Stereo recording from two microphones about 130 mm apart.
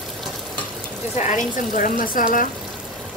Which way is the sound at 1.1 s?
65° left (ahead or behind).